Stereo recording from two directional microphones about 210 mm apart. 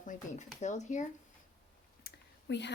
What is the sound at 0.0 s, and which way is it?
Speech, 35° left (ahead or behind).